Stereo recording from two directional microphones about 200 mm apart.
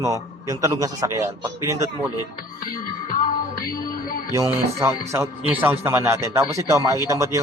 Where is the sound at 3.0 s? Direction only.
45° left (ahead or behind).